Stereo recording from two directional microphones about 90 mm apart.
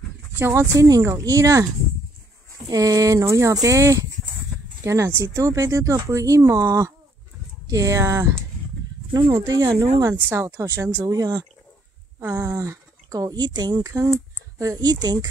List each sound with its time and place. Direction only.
0.4 s speech: 30° right (ahead or behind)
2.7 s speech: 40° right (ahead or behind)
10.2 s speech: 30° right (ahead or behind); by 15.1 s 50° right (ahead or behind)